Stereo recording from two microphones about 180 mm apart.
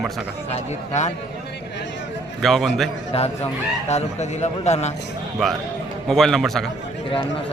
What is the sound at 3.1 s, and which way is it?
A man's voice, 35° left (ahead or behind).